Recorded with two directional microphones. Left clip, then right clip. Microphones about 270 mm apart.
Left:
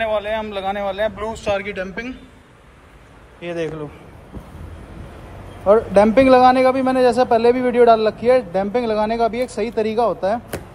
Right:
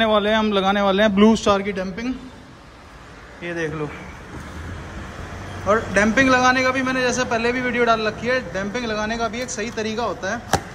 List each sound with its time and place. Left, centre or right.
0.0 s a man's voice: right
1.5 s a man's voice: centre
5.7 s a man's voice: centre